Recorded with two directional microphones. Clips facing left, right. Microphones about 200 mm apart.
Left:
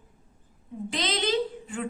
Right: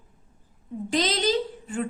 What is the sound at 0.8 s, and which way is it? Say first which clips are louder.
Speech: right 4 dB; 40° right (ahead or behind).